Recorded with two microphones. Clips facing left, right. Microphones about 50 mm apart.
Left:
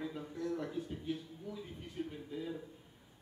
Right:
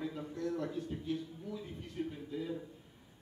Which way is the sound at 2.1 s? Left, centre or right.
Centre.